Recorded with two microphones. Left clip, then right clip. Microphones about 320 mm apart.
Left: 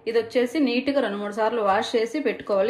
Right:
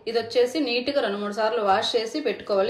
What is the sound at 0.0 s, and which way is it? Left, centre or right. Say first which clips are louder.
A woman's voice: even; left.